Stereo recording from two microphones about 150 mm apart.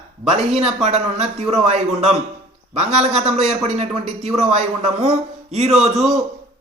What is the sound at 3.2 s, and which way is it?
A man's voice, 45° right (ahead or behind).